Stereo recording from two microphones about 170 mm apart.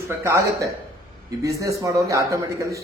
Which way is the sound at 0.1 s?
15° right (ahead or behind).